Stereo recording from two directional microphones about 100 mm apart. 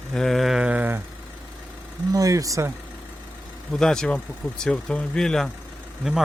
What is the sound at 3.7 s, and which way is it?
Speech, 5° left (ahead or behind).